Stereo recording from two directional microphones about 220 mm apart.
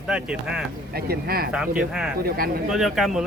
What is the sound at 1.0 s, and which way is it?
Speech, 45° right (ahead or behind).